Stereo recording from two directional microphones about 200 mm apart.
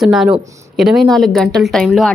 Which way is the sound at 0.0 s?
Centre (ahead or behind).